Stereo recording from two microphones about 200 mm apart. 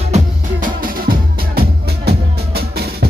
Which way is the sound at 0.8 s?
45° right (ahead or behind).